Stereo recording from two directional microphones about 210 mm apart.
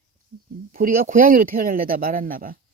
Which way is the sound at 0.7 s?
40° right (ahead or behind).